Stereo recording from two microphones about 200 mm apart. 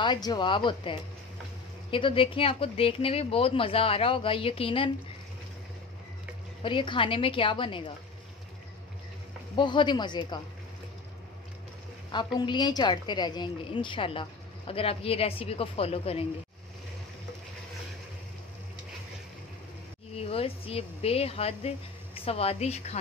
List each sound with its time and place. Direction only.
0.0 s speech: 20° left (ahead or behind)
6.6 s speech: 25° left (ahead or behind)
9.6 s speech: 25° left (ahead or behind)
12.1 s speech: 25° left (ahead or behind)
20.2 s speech: 30° left (ahead or behind)